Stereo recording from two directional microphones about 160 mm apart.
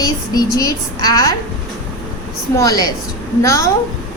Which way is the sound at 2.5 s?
25° left (ahead or behind).